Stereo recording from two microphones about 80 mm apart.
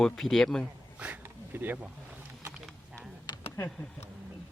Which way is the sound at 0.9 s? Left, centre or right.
Centre.